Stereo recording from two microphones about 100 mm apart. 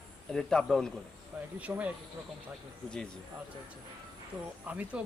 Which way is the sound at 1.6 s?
15° right (ahead or behind).